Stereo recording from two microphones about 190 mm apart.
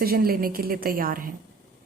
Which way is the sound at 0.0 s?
50° right (ahead or behind).